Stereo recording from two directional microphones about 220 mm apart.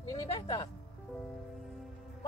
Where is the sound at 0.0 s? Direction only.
15° left (ahead or behind).